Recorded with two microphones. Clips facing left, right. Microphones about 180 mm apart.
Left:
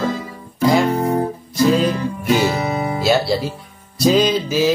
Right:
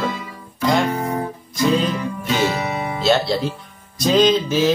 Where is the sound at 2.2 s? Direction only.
35° left (ahead or behind).